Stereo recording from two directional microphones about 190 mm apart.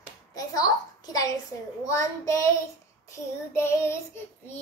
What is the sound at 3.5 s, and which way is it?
Child singing, 15° left (ahead or behind).